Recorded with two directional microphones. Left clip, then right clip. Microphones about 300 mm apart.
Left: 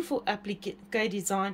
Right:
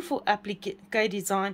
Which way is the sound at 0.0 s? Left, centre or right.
Centre.